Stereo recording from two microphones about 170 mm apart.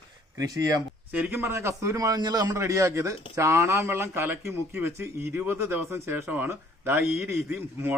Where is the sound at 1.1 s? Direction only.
10° right (ahead or behind).